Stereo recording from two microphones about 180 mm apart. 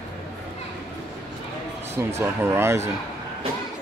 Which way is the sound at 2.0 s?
15° right (ahead or behind).